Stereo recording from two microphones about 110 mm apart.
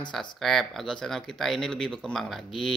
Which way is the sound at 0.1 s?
5° left (ahead or behind).